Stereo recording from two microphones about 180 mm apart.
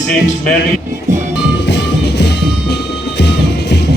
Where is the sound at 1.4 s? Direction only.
70° left (ahead or behind).